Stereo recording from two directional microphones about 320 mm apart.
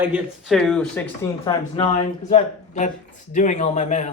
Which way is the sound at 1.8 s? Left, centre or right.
Centre.